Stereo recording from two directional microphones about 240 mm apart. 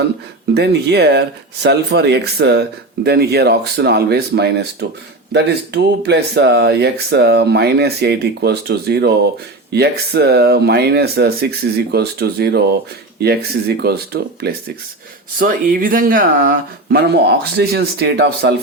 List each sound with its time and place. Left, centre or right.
0.5 s speech: right